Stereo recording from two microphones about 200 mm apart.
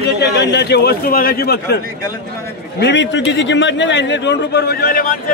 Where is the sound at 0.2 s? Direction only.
55° left (ahead or behind).